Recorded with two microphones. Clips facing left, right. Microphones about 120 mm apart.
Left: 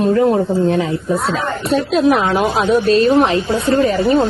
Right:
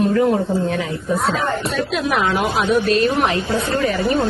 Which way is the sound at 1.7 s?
35° left (ahead or behind).